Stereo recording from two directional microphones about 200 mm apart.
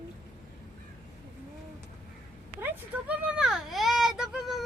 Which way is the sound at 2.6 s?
5° right (ahead or behind).